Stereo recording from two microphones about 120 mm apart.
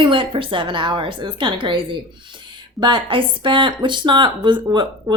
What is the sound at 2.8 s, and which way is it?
Speech, 45° right (ahead or behind).